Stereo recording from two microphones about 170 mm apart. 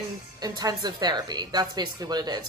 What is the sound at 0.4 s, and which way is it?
A woman's voice, 25° right (ahead or behind).